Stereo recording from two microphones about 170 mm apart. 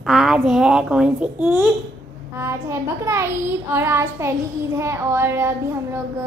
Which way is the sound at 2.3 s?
15° right (ahead or behind).